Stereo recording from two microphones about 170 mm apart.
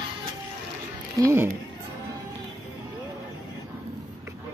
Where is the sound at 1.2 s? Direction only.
15° right (ahead or behind).